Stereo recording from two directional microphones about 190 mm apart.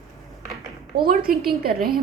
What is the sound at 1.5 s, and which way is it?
Speech, 50° right (ahead or behind).